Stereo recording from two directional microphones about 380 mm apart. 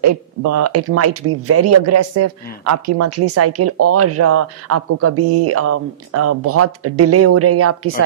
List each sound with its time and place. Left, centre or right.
0.0 s speech: right